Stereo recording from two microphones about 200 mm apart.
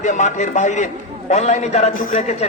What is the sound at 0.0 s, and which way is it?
A man's voice, 35° left (ahead or behind).